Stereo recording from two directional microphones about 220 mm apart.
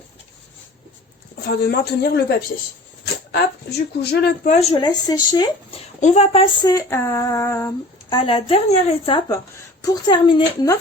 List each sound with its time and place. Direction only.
1.5 s a woman's voice: 45° left (ahead or behind)
3.3 s a woman's voice: 50° left (ahead or behind)
4.4 s a woman's voice: 25° left (ahead or behind)
6.0 s a sound: 30° left (ahead or behind); by 7.7 s 15° left (ahead or behind)
8.1 s a woman's voice: 25° left (ahead or behind)
9.8 s a sound: 20° left (ahead or behind)